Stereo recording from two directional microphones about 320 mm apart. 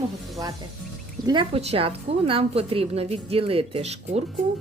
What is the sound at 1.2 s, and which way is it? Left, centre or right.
Speech, centre.